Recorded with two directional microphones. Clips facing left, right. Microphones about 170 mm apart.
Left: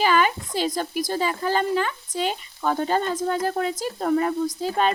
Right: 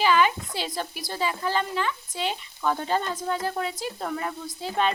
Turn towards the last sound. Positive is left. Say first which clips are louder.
# left 4 dB
turn(degrees=40)  # may be behind; listen again after turning